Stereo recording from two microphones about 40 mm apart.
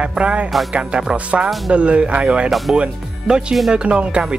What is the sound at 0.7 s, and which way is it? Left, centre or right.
Speech, right.